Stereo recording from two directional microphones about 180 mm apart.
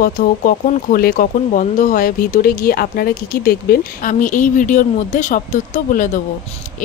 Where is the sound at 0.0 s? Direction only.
50° left (ahead or behind).